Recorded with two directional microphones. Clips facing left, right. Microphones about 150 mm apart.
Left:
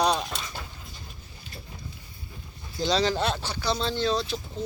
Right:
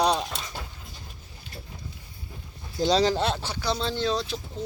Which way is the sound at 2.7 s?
40° right (ahead or behind).